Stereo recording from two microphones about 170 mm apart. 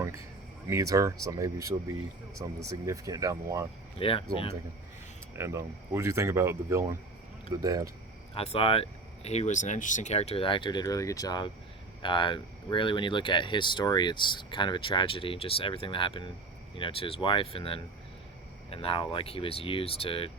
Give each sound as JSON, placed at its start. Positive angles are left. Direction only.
{"t": 0.7, "sound": "speech", "side_deg": -20}
{"t": 3.9, "sound": "speech", "side_deg": 35}
{"t": 5.4, "sound": "speech", "side_deg": -15}
{"t": 8.4, "sound": "speech", "side_deg": 35}